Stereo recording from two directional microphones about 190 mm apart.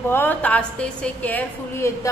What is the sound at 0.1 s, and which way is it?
A woman's voice, 10° left (ahead or behind).